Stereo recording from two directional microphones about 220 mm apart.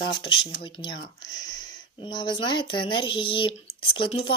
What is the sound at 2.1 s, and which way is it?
Speech, 20° left (ahead or behind).